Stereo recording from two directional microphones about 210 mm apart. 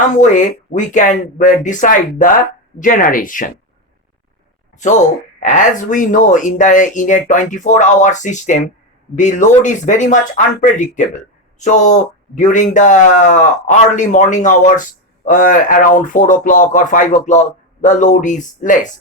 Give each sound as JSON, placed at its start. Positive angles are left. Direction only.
{"t": 0.2, "sound": "speech", "side_deg": 35}
{"t": 5.4, "sound": "speech", "side_deg": 40}